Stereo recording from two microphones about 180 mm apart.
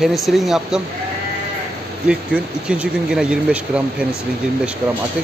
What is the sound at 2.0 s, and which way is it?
Speech, 5° right (ahead or behind).